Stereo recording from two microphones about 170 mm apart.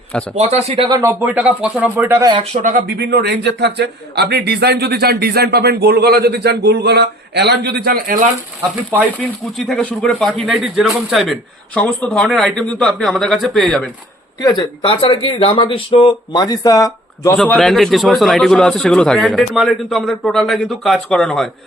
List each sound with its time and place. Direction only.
0.3 s speech: 40° right (ahead or behind)
0.9 s speech: 25° right (ahead or behind)
1.2 s speech: 10° right (ahead or behind)
2.3 s speech: 40° right (ahead or behind); by 7.8 s 75° right (ahead or behind)
7.9 s speech: 55° right (ahead or behind)
9.1 s a man's voice: 5° left (ahead or behind)
14.4 s speech: 25° left (ahead or behind)
17.3 s a man's voice: 5° left (ahead or behind)